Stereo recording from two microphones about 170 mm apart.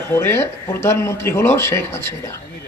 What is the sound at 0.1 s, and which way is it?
Speech, 15° left (ahead or behind).